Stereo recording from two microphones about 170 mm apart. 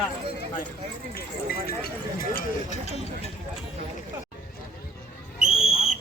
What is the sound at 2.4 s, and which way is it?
Speech, 45° left (ahead or behind).